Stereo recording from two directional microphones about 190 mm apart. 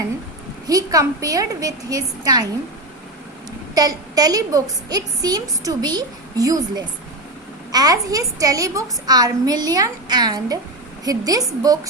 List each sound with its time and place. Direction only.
0.7 s a woman's voice: 20° right (ahead or behind)
3.8 s a woman's voice: 20° right (ahead or behind)